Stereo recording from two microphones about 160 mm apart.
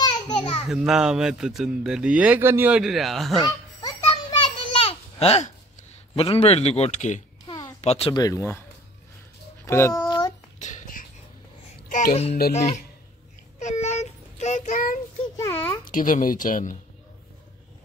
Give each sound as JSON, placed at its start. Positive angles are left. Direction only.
{"t": 0.4, "sound": "a sound", "side_deg": 35}
{"t": 0.7, "sound": "speech", "side_deg": -5}
{"t": 3.4, "sound": "children playing", "side_deg": 25}
{"t": 4.7, "sound": "babbling", "side_deg": 40}
{"t": 6.1, "sound": "speech", "side_deg": 35}
{"t": 8.1, "sound": "speech", "side_deg": 20}
{"t": 9.7, "sound": "a child's voice", "side_deg": 15}
{"t": 10.0, "sound": "a sound", "side_deg": 25}
{"t": 10.6, "sound": "music", "side_deg": 55}
{"t": 11.9, "sound": "speech", "side_deg": 55}
{"t": 13.6, "sound": "child singing", "side_deg": 45}
{"t": 15.3, "sound": "a sound", "side_deg": 20}
{"t": 15.9, "sound": "speech", "side_deg": 55}